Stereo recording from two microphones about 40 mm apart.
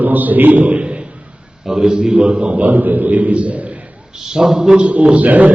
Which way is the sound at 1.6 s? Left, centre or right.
Centre.